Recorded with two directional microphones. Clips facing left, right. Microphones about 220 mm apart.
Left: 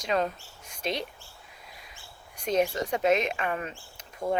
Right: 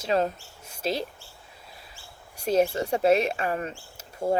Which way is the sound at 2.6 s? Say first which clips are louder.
Right 3 dB; 25° right (ahead or behind).